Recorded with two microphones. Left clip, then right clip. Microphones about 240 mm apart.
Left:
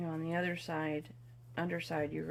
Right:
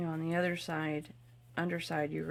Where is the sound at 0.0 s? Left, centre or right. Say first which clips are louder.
Right 3 dB; right.